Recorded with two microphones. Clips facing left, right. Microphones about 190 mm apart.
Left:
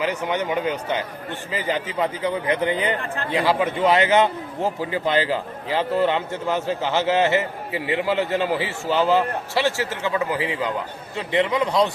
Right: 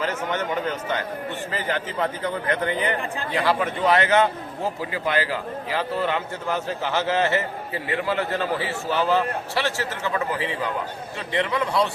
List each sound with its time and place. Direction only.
0.0 s a man's voice: 15° left (ahead or behind)